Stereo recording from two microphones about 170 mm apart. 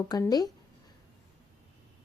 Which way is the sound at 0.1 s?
25° left (ahead or behind).